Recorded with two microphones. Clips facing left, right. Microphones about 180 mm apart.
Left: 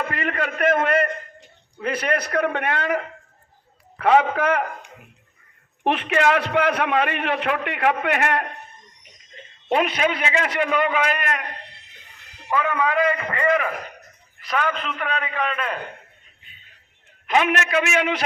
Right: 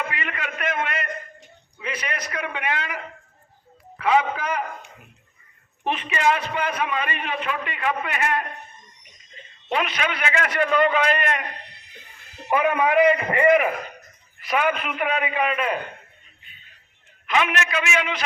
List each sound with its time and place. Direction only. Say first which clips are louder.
0.1 s a man's voice: left 6 dB; 45° left (ahead or behind)
4.0 s a man's voice: left 4 dB; 55° left (ahead or behind)
5.8 s a man's voice: left 3 dB; 70° left (ahead or behind)
9.6 s a man's voice: left 5 dB; 40° left (ahead or behind)
10.2 s a man's voice: left 1 dB; 25° left (ahead or behind)
10.5 s a man's voice: right 5 dB; 10° left (ahead or behind)
11.6 s a sound: left 2 dB; 25° left (ahead or behind)
12.5 s a man's voice: right 2 dB; 20° right (ahead or behind)
17.2 s a man's voice: left 3 dB; 45° left (ahead or behind)